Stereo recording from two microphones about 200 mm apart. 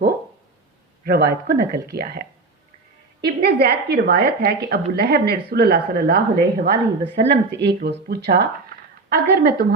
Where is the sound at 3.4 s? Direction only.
55° right (ahead or behind).